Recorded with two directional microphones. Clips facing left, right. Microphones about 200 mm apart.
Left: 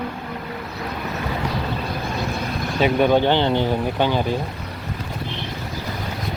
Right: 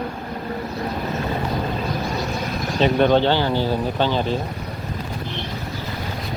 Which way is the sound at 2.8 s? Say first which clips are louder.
Even; 10° left (ahead or behind).